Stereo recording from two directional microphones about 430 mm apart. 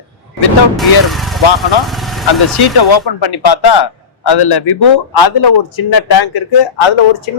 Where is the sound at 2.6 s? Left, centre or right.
Left.